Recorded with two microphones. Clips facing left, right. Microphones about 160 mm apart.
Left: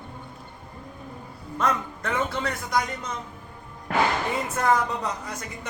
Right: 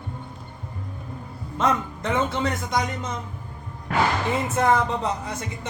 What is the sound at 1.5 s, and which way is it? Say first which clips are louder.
Speech: right 3 dB; 20° right (ahead or behind).